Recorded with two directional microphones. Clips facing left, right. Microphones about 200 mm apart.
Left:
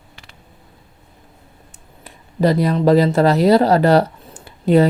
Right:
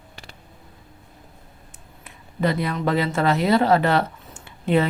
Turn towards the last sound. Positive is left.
turn(degrees=35)  # may be behind; listen again after turning